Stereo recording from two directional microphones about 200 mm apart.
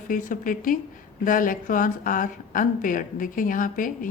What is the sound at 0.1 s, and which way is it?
Speech, 40° left (ahead or behind).